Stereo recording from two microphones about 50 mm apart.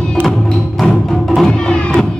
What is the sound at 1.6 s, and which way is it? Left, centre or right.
Music, left.